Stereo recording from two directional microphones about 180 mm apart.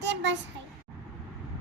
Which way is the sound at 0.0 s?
80° right.